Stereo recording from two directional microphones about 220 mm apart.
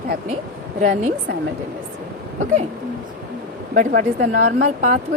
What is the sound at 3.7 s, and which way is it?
A woman's voice, 40° right (ahead or behind).